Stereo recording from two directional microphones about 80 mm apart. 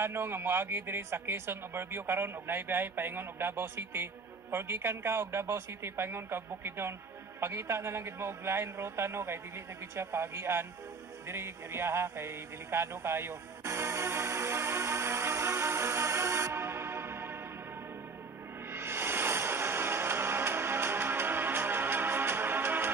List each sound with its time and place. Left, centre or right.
0.0 s a man's voice: right
11.2 s music: right
18.7 s music: right